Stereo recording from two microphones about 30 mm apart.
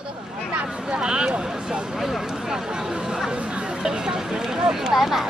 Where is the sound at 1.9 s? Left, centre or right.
Centre.